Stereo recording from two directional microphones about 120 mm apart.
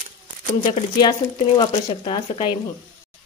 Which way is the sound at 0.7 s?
40° left (ahead or behind).